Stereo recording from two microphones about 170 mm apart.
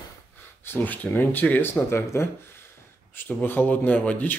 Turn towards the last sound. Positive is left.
turn(degrees=10)  # may be behind; listen again after turning